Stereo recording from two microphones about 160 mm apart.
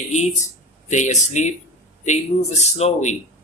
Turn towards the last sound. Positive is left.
turn(degrees=45)  # may be behind; listen again after turning